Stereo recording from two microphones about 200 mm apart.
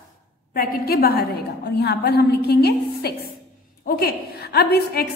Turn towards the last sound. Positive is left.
turn(degrees=50)  # may be behind; listen again after turning